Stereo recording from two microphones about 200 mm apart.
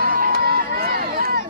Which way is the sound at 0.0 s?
45° right (ahead or behind).